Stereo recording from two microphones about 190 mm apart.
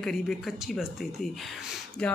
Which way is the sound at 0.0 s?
Centre (ahead or behind).